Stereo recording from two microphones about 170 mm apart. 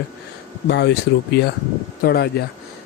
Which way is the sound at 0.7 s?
90° left.